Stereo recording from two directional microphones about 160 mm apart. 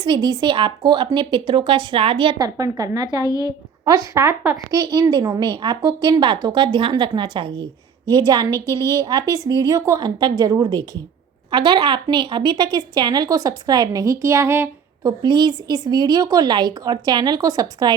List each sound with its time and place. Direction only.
0.0 s speech: 25° right (ahead or behind)
3.2 s a woman's voice: 20° left (ahead or behind)
3.8 s speech: 20° right (ahead or behind)
8.5 s a woman's voice: 15° left (ahead or behind)
9.0 s speech: 25° right (ahead or behind)
15.2 s speech: 25° right (ahead or behind)